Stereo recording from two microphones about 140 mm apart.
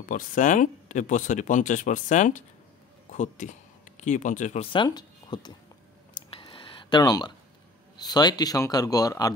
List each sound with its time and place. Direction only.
0.1 s speech: 70° left (ahead or behind)
4.8 s speech: 30° left (ahead or behind)
6.1 s a sound: 35° left (ahead or behind)
8.0 s speech: 30° left (ahead or behind)